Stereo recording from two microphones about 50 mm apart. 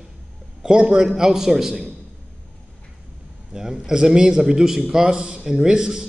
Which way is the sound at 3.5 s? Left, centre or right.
Centre.